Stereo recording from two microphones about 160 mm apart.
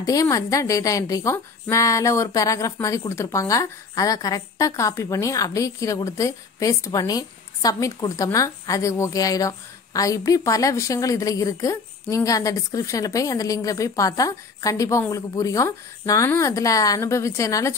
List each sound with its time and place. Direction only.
0.0 s a woman's voice: 20° left (ahead or behind)